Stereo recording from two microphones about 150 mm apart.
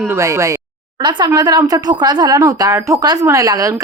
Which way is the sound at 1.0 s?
30° right (ahead or behind).